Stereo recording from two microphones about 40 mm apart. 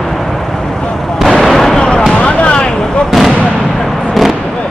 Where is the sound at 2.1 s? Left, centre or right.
Left.